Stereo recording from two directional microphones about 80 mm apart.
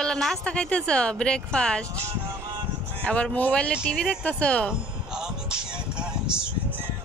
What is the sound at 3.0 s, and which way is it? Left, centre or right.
A woman's voice, centre.